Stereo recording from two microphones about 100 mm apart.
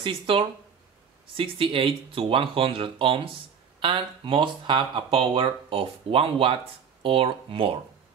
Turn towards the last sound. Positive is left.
turn(degrees=-65)  # may be behind; listen again after turning